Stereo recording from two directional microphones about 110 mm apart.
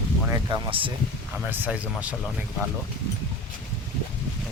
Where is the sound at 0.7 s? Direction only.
50° right (ahead or behind).